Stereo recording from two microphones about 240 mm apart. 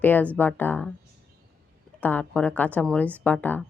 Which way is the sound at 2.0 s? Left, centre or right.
Centre.